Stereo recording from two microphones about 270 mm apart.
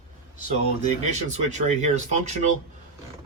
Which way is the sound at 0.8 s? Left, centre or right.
Right.